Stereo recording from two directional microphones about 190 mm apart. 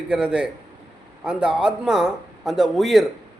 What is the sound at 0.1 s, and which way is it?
A man's voice, 5° right (ahead or behind).